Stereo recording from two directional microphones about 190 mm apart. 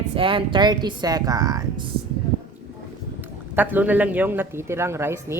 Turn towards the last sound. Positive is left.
turn(degrees=-15)  # may be behind; listen again after turning